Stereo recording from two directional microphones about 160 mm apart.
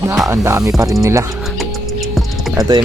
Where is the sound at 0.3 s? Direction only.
15° right (ahead or behind).